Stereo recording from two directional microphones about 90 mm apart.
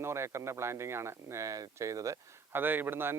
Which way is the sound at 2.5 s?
20° right (ahead or behind).